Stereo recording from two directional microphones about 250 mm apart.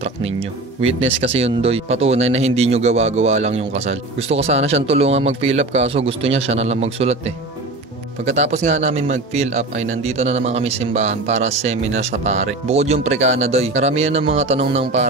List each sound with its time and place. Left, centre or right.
0.4 s speech: right